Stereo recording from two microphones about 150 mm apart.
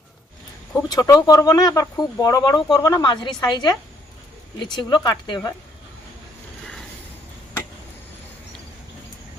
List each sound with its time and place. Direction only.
0.9 s speech: 25° left (ahead or behind)